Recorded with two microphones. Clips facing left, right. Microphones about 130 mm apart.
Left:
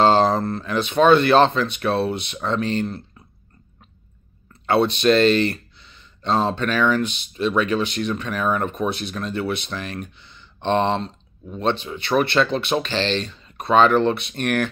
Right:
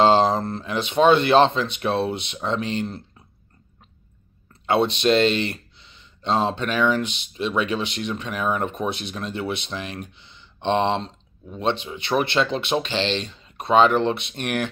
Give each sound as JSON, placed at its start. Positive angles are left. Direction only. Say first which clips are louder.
{"t": 0.0, "sound": "speech", "louder": "left 1 dB", "side_deg": -20}
{"t": 4.6, "sound": "speech", "louder": "left 2 dB", "side_deg": -20}